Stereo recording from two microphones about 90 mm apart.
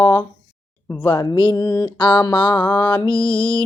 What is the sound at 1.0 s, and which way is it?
Mantra, 55° left (ahead or behind).